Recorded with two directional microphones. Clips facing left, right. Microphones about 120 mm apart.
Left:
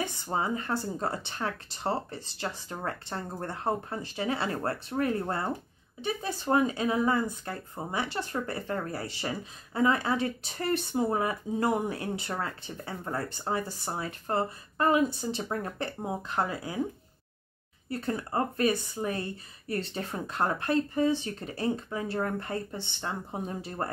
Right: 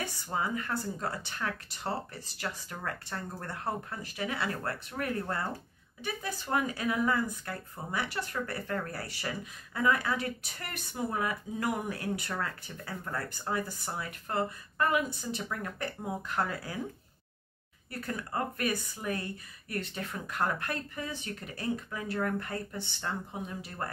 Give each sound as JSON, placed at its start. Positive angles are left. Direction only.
{"t": 0.0, "sound": "speech", "side_deg": 20}
{"t": 17.8, "sound": "speech", "side_deg": 25}